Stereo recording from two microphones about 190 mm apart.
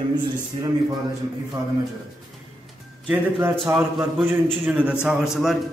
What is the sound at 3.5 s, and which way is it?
A man's voice, centre (ahead or behind).